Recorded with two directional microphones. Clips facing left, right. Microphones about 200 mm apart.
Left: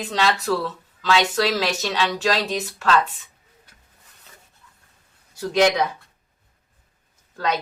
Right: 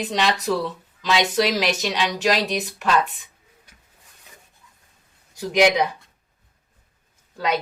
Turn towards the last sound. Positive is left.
turn(degrees=-10)  # may be behind; listen again after turning